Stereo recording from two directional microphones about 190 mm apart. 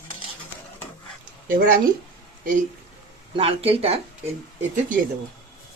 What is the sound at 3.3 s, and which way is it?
Speech, 30° right (ahead or behind).